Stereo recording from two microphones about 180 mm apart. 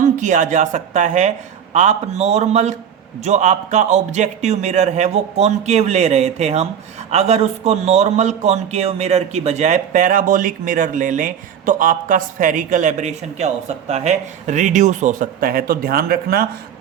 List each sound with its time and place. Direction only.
0.0 s a man's voice: 45° right (ahead or behind)